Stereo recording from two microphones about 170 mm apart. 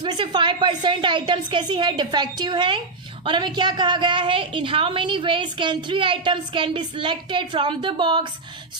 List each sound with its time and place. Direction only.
0.0 s a woman's voice: 25° right (ahead or behind)